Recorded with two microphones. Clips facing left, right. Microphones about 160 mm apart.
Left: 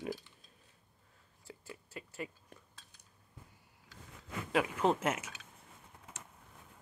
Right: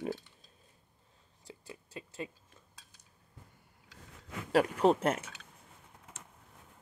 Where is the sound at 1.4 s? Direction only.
20° right (ahead or behind).